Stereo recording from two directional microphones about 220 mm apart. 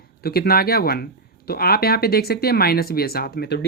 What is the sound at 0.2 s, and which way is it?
Speech, 45° left (ahead or behind).